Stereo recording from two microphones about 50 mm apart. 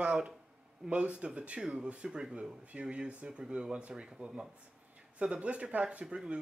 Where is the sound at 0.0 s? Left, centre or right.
Centre.